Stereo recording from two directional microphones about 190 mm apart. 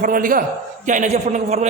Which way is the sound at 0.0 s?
45° right (ahead or behind).